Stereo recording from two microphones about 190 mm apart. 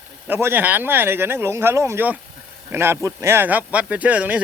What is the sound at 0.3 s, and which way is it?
Speech, 10° right (ahead or behind).